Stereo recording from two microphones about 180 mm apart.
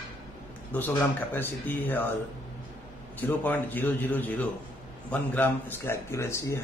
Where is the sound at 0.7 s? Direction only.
10° left (ahead or behind).